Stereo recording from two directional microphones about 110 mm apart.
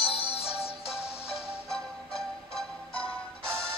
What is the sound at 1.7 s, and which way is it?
Music, 5° left (ahead or behind).